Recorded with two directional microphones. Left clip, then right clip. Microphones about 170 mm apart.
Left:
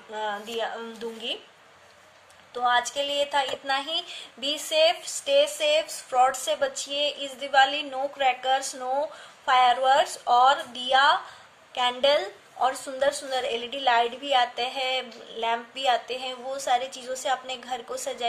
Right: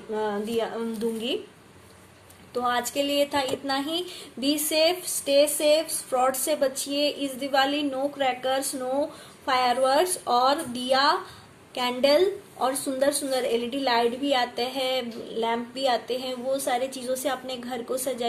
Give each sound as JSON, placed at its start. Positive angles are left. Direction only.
{"t": 0.1, "sound": "a woman's voice", "side_deg": 5}
{"t": 2.5, "sound": "a woman's voice", "side_deg": 0}
{"t": 16.9, "sound": "a woman's voice", "side_deg": 40}
{"t": 17.2, "sound": "a woman's voice", "side_deg": 0}